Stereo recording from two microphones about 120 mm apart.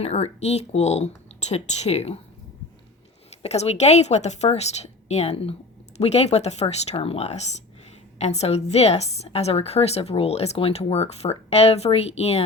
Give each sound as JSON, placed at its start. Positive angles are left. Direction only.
{"t": 0.0, "sound": "a woman's voice", "side_deg": 60}
{"t": 3.4, "sound": "a woman's voice", "side_deg": 65}